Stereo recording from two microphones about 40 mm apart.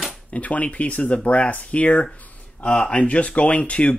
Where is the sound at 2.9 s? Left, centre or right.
Left.